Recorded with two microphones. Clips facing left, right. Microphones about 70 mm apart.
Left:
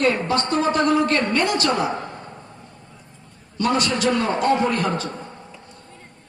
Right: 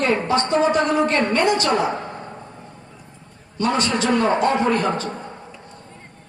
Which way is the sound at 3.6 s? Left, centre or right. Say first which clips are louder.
Even; right.